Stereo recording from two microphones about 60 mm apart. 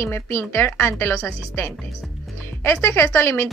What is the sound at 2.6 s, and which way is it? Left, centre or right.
Speech, left.